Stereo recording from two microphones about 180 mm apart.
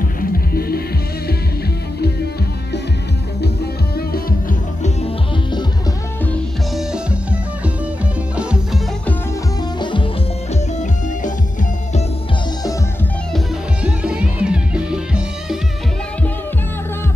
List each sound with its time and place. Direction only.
0.2 s music: 55° left (ahead or behind)
8.4 s music: 5° right (ahead or behind)
13.8 s music: 5° right (ahead or behind)